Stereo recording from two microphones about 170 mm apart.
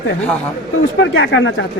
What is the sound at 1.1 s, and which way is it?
Speech, 90° left.